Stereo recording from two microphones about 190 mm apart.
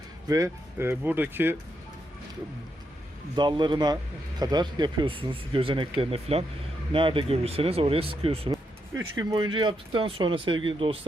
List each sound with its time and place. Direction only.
0.3 s speech: 15° right (ahead or behind)
3.3 s speech: 25° right (ahead or behind)
9.1 s speech: 20° right (ahead or behind)